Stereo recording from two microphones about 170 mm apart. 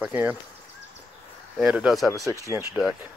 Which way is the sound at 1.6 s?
5° right (ahead or behind).